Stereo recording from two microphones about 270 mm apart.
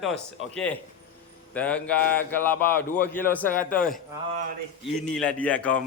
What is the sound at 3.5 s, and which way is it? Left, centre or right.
Speech, left.